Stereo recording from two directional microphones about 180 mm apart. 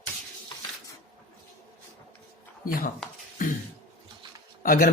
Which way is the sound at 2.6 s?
50° left (ahead or behind).